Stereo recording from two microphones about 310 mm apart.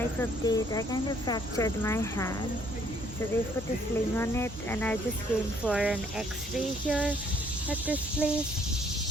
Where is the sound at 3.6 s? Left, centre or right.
Centre.